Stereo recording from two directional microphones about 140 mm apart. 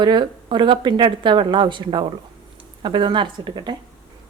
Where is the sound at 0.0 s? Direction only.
35° right (ahead or behind).